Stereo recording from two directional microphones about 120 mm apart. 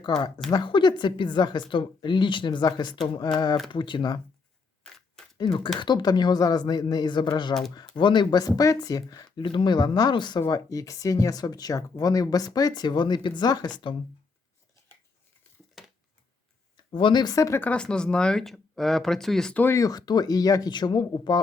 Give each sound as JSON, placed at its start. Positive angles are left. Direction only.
{"t": 0.5, "sound": "speech", "side_deg": 40}
{"t": 5.4, "sound": "speech", "side_deg": 45}
{"t": 10.5, "sound": "speech", "side_deg": 30}
{"t": 15.8, "sound": "a sound", "side_deg": 0}
{"t": 16.7, "sound": "speech", "side_deg": 45}
{"t": 17.6, "sound": "speech", "side_deg": 10}
{"t": 19.6, "sound": "speech", "side_deg": 25}